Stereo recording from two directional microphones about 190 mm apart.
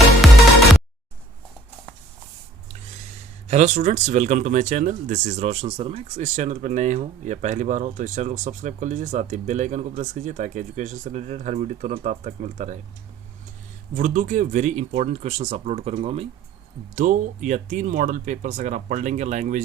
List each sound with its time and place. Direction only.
3.5 s speech: 40° right (ahead or behind)
13.9 s speech: 40° right (ahead or behind)
16.9 s speech: 40° right (ahead or behind)